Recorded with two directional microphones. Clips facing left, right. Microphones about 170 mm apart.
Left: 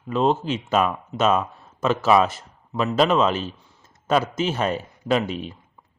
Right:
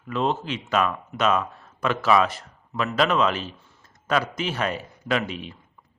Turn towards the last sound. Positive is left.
turn(degrees=40)  # may be behind; listen again after turning